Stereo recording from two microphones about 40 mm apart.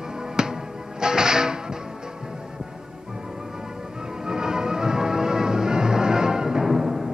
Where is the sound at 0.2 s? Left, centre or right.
Centre.